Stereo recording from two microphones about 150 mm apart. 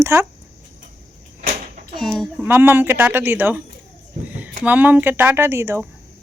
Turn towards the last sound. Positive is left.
turn(degrees=-15)  # may be behind; listen again after turning